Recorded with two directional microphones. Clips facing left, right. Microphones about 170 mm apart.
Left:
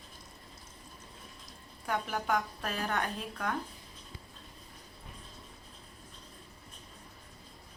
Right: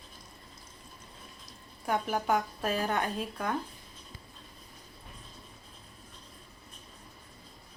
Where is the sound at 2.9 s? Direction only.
15° right (ahead or behind).